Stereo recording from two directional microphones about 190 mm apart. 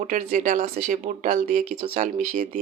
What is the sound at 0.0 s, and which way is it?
Speech, 40° right (ahead or behind).